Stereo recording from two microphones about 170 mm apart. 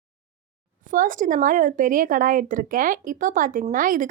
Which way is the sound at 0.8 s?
50° right (ahead or behind).